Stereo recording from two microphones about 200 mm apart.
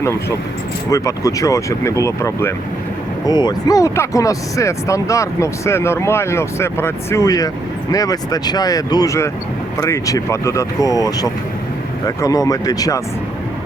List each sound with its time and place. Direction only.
0.0 s speech: 15° left (ahead or behind)